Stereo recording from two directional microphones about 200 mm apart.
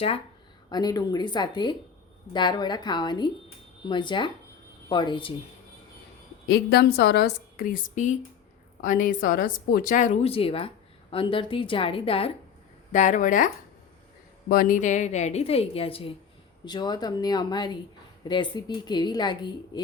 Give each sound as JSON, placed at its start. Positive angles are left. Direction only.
{"t": 0.7, "sound": "a woman's voice", "side_deg": 20}
{"t": 6.5, "sound": "a woman's voice", "side_deg": 55}
{"t": 12.9, "sound": "speech", "side_deg": 40}
{"t": 14.5, "sound": "a woman's voice", "side_deg": 40}